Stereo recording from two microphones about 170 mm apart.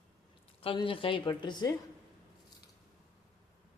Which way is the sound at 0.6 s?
30° left (ahead or behind).